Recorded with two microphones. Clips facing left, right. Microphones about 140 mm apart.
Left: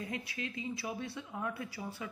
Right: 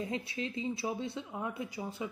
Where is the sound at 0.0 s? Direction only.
25° right (ahead or behind).